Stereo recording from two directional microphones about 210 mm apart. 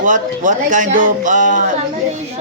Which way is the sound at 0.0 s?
35° right (ahead or behind).